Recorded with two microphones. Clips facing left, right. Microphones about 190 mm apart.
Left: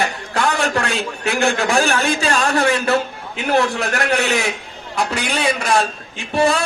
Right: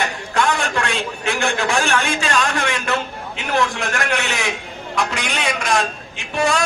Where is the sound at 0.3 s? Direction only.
35° left (ahead or behind).